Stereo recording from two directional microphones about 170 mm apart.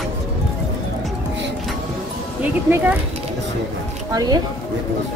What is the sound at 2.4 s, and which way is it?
Speech, 10° right (ahead or behind).